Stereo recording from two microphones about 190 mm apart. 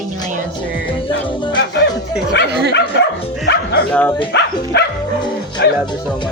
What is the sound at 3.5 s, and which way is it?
Speech, 65° left (ahead or behind).